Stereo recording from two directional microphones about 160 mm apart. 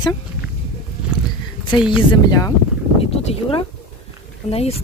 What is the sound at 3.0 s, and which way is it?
Speech, 40° left (ahead or behind).